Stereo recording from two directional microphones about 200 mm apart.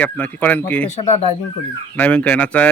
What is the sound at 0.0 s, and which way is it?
Speech, 10° left (ahead or behind).